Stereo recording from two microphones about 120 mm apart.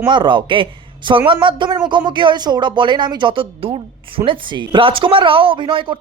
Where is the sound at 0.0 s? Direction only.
40° right (ahead or behind).